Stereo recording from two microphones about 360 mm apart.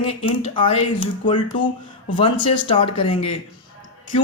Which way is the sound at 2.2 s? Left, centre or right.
Centre.